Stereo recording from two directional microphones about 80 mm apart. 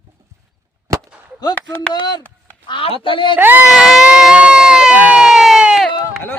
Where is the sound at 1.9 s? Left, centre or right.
Left.